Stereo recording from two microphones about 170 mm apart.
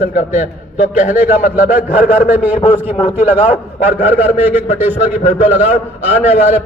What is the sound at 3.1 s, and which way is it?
A man's voice, 10° right (ahead or behind).